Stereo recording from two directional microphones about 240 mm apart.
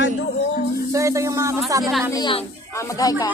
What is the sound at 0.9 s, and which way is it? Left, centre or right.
Speech, centre.